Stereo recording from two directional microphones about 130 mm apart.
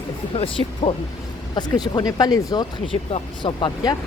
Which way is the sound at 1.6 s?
35° left (ahead or behind).